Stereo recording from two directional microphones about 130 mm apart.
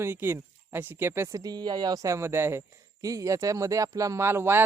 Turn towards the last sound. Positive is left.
turn(degrees=-20)  # may be behind; listen again after turning